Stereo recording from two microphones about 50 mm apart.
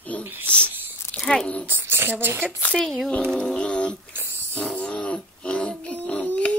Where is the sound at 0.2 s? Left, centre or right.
Right.